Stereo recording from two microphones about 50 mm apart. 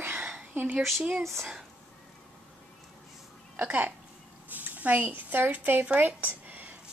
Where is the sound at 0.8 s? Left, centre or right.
Centre.